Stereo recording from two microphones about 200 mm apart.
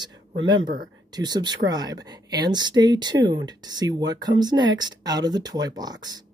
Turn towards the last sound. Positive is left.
turn(degrees=-20)  # may be behind; listen again after turning